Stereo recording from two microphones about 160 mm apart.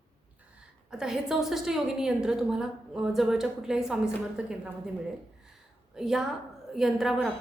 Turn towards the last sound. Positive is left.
turn(degrees=0)  # may be behind; listen again after turning